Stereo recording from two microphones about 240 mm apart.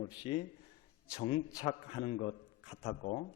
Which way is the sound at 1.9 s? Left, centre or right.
Left.